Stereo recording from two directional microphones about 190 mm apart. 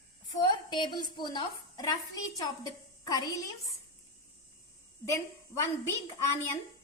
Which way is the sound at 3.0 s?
20° left (ahead or behind).